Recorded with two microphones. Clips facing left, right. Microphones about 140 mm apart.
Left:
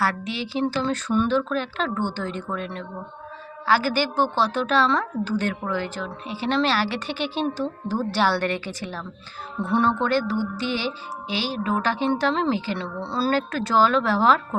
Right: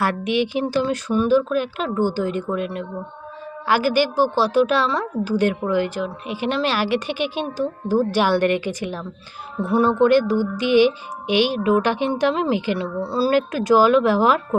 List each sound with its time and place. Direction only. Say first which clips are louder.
0.0 s a woman's voice: right 6 dB; 15° right (ahead or behind)